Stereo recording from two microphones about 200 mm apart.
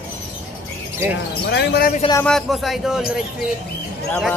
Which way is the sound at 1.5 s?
55° left (ahead or behind).